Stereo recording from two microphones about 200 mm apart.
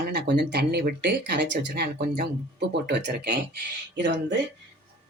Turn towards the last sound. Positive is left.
turn(degrees=-60)  # may be behind; listen again after turning